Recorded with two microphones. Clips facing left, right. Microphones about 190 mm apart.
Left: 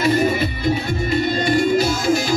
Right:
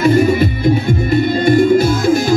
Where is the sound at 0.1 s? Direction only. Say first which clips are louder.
Right 6 dB; 50° right (ahead or behind).